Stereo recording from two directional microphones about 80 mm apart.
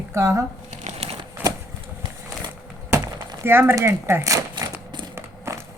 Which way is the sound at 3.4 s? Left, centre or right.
Right.